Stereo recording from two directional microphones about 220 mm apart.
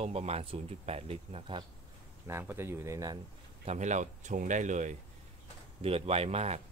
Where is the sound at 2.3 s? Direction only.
10° right (ahead or behind).